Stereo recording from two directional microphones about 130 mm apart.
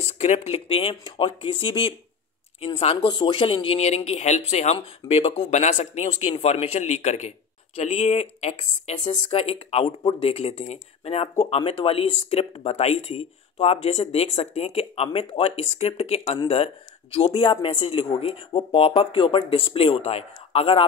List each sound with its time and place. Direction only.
0.0 s speech: 55° left (ahead or behind)